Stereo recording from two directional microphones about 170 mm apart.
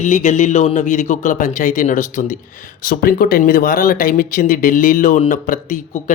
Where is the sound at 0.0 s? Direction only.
45° left (ahead or behind).